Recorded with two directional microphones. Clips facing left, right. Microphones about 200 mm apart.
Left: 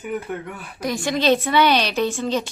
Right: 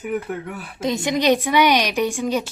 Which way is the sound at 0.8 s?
20° right (ahead or behind).